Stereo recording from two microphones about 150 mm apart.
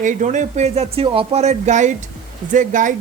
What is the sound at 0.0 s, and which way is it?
Speech, 60° right (ahead or behind).